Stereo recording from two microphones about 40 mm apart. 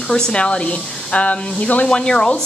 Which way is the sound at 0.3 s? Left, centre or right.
Left.